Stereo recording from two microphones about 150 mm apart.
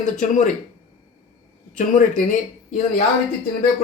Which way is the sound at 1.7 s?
60° left (ahead or behind).